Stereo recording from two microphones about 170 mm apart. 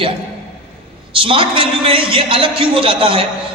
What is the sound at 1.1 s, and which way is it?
A man's voice, 30° right (ahead or behind).